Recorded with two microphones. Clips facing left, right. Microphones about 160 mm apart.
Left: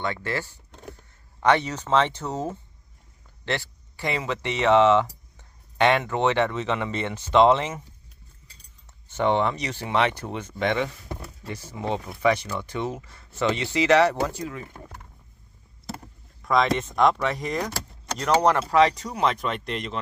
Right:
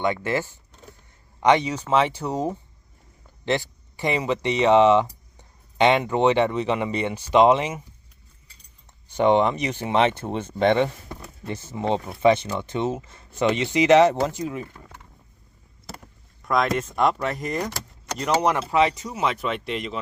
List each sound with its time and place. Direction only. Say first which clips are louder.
0.0 s speech: right 5 dB; 15° right (ahead or behind)
9.0 s speech: right 4 dB; 15° right (ahead or behind)
16.4 s speech: even; centre (ahead or behind)